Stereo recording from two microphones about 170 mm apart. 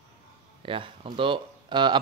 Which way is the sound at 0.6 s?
30° right (ahead or behind).